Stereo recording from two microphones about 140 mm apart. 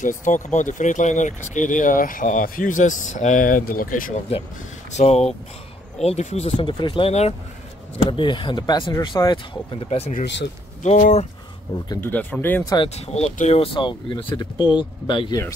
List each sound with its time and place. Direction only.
0.3 s speech: 65° left (ahead or behind); by 4.1 s 85° left
4.3 s speech: 45° left (ahead or behind)
8.1 s speech: 35° left (ahead or behind)
10.8 s speech: 60° left (ahead or behind)
12.0 s speech: 10° left (ahead or behind)
12.6 s speech: 35° left (ahead or behind)
12.9 s speech: 50° left (ahead or behind); by 15.4 s 35° left (ahead or behind)